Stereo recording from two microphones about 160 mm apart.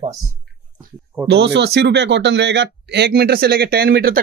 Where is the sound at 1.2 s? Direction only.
90° right; by 4.1 s 75° right (ahead or behind).